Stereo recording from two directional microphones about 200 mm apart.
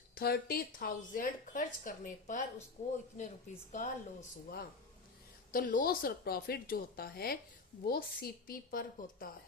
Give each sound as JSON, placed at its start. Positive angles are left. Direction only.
{"t": 0.2, "sound": "a woman's voice", "side_deg": 50}
{"t": 3.7, "sound": "a woman's voice", "side_deg": 40}